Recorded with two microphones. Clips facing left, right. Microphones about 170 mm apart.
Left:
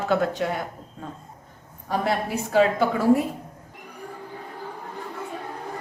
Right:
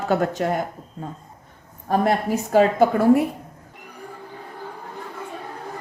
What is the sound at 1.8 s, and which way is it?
A woman's voice, 50° right (ahead or behind).